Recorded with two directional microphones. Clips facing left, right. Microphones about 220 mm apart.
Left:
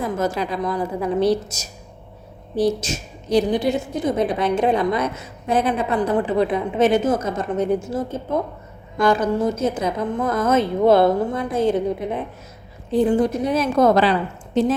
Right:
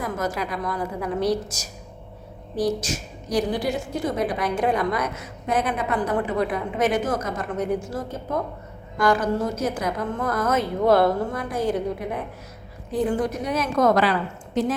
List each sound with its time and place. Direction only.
0.0 s a woman's voice: 25° left (ahead or behind)